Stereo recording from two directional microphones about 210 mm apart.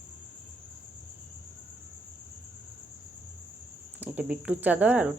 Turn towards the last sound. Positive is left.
turn(degrees=-5)  # may be behind; listen again after turning